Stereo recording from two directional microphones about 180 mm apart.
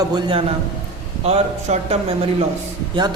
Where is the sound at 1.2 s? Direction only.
35° right (ahead or behind).